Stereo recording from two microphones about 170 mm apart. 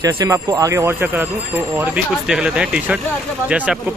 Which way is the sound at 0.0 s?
20° right (ahead or behind).